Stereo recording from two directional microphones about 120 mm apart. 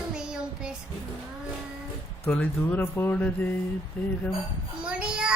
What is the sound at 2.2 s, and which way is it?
Speech, 15° left (ahead or behind).